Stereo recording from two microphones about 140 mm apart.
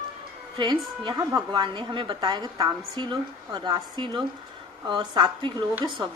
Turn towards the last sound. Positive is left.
turn(degrees=-30)  # may be behind; listen again after turning